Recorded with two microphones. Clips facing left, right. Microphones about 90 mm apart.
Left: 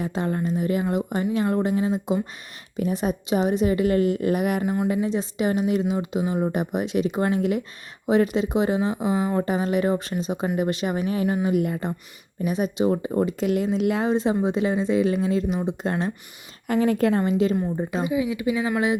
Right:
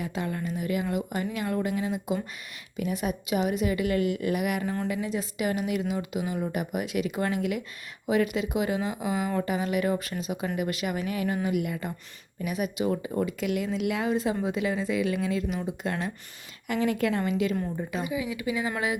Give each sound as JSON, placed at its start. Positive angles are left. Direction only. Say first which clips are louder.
{"t": 0.0, "sound": "speech", "louder": "left 6 dB", "side_deg": 35}
{"t": 4.6, "sound": "speech", "louder": "left 6 dB", "side_deg": 15}
{"t": 5.0, "sound": "speech", "louder": "left 5 dB", "side_deg": 30}